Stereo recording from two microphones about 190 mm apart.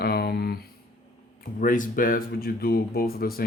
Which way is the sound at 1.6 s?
45° left (ahead or behind).